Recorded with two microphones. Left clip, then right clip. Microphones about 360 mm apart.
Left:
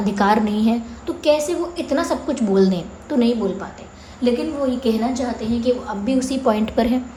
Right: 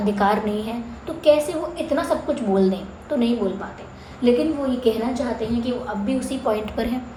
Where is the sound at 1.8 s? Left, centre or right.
Left.